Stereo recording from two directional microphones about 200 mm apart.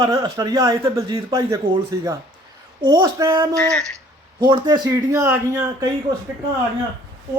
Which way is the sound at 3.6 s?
5° left (ahead or behind).